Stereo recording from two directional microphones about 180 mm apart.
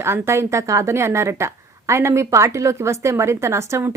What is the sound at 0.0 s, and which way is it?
A woman's voice, 15° right (ahead or behind).